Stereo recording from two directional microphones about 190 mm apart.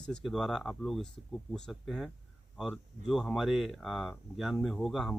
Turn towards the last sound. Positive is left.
turn(degrees=0)  # may be behind; listen again after turning